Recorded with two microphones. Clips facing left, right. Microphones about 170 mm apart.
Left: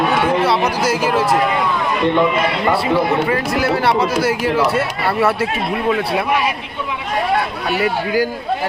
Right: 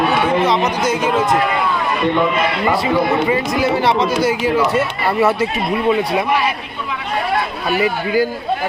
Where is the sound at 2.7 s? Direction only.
5° right (ahead or behind).